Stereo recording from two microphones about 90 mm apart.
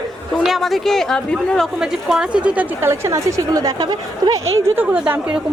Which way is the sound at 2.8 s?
30° right (ahead or behind).